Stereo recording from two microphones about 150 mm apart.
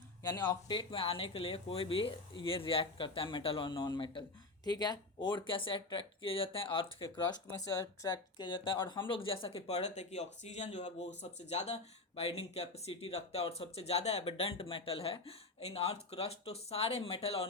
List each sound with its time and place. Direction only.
0.2 s speech: 25° left (ahead or behind); by 17.4 s 40° left (ahead or behind)